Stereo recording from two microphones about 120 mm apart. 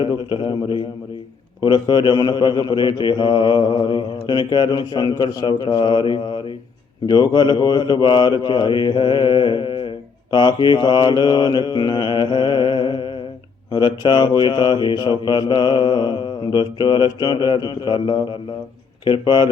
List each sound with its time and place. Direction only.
0.0 s a man's voice: 45° left (ahead or behind)